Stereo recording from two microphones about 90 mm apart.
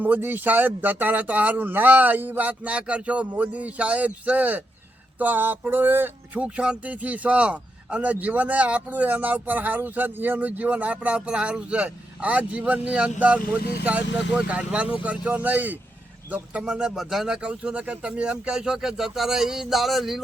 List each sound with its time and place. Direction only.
0.0 s speech: 20° right (ahead or behind)
6.4 s a man's voice: 10° right (ahead or behind)